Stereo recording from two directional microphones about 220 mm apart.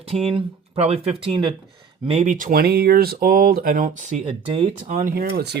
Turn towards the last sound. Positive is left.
turn(degrees=-45)  # may be behind; listen again after turning